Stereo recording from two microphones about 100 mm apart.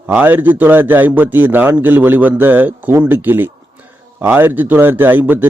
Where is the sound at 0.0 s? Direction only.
15° right (ahead or behind).